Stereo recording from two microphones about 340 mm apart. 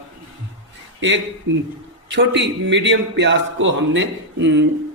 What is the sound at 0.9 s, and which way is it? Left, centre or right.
A man's voice, right.